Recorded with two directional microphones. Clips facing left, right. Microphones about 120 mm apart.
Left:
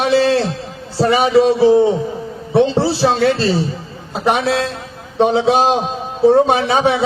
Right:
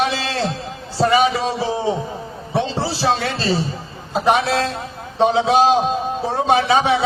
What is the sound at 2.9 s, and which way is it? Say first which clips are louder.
Speech: left 3 dB; 55° left (ahead or behind).